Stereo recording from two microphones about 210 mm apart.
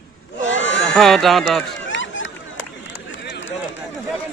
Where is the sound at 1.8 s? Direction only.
60° left (ahead or behind).